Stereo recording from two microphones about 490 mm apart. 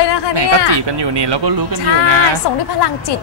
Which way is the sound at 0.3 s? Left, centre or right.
Right.